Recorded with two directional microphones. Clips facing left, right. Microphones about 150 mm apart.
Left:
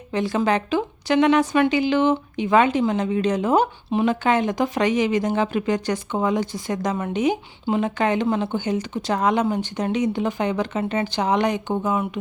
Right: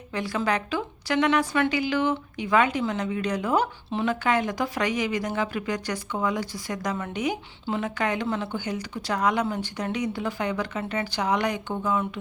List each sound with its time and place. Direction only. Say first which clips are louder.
0.1 s a woman's voice: left 5 dB; 25° left (ahead or behind)